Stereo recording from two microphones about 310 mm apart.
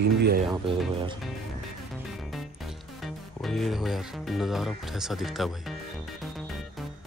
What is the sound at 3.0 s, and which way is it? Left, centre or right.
Speech, centre.